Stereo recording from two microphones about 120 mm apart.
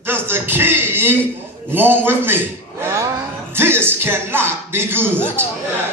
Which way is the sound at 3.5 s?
20° right (ahead or behind).